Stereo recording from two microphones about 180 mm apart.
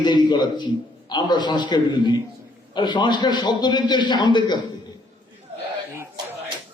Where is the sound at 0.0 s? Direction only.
25° left (ahead or behind).